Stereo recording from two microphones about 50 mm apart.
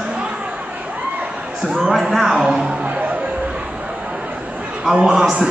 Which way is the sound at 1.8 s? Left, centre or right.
Centre.